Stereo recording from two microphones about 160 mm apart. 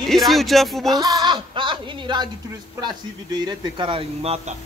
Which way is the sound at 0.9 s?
25° right (ahead or behind).